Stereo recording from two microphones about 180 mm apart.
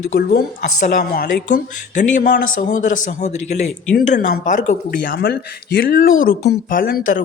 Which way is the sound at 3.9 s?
60° left (ahead or behind).